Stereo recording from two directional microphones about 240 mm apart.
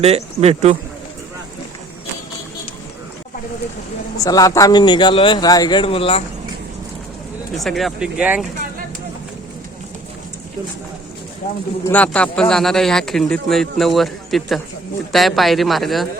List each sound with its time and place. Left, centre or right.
0.0 s speech: right
4.2 s a man's voice: centre
7.5 s speech: centre
11.9 s speech: centre